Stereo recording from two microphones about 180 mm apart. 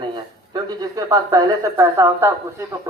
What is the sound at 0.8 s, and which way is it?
A man's voice, 20° right (ahead or behind).